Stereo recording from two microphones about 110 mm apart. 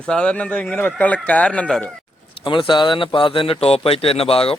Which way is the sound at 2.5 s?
45° left (ahead or behind).